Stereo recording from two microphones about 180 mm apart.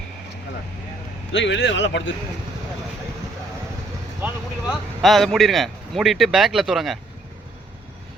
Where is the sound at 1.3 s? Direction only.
90° left.